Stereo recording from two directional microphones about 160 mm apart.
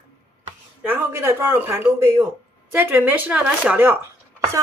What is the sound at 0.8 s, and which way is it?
Speech, 10° right (ahead or behind).